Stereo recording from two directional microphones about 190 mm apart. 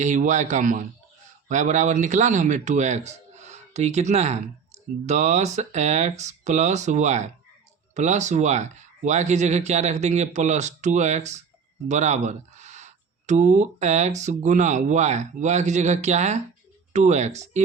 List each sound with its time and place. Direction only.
0.0 s speech: 40° right (ahead or behind)